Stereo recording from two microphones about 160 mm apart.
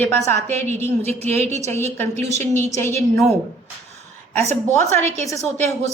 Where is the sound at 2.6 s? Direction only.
15° left (ahead or behind).